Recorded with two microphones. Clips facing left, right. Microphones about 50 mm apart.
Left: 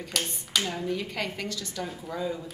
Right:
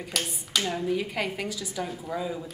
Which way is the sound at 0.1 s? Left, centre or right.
Centre.